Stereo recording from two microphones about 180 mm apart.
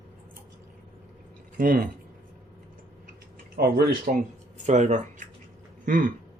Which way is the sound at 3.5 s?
60° right (ahead or behind).